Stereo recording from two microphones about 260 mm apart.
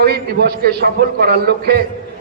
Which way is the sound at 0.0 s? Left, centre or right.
Right.